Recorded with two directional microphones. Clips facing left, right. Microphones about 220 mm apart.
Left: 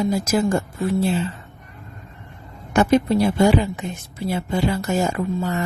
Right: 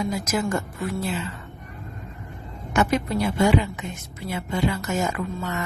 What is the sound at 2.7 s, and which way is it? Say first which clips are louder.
A woman's voice: left 6 dB; 30° left (ahead or behind).